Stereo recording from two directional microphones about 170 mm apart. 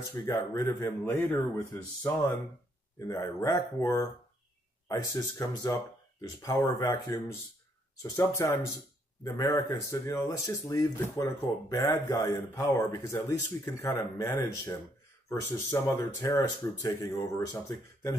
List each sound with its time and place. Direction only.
0.0 s speech: 20° left (ahead or behind)